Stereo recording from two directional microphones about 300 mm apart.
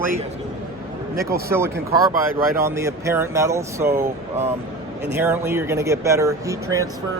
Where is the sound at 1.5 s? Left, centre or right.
Centre.